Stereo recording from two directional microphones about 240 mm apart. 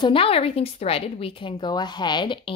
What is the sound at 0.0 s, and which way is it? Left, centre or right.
A woman's voice, left.